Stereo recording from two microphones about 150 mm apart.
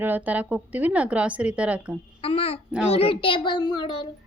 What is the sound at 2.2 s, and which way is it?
A child's voice, 40° left (ahead or behind).